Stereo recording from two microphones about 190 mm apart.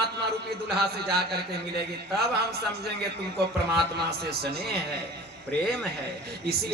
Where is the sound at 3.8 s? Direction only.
55° right (ahead or behind).